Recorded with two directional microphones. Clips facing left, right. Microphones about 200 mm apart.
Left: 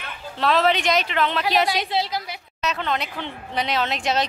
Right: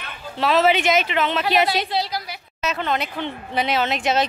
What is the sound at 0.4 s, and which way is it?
Speech, 5° right (ahead or behind).